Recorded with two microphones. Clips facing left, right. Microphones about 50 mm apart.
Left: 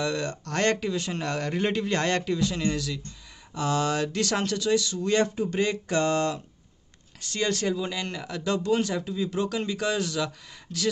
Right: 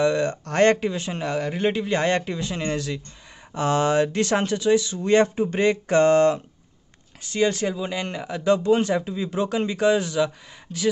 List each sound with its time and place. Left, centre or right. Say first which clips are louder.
0.0 s speech: right 7 dB; right
1.2 s speech: right 5 dB; centre